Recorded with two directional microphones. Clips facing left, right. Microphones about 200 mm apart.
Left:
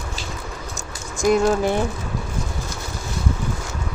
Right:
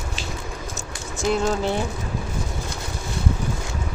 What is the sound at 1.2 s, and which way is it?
Speech, 15° left (ahead or behind).